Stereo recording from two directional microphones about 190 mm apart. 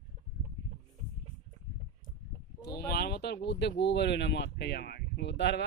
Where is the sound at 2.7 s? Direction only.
55° left (ahead or behind).